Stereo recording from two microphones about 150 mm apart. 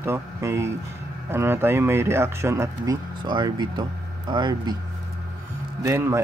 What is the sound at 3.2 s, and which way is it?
Speech, 30° right (ahead or behind).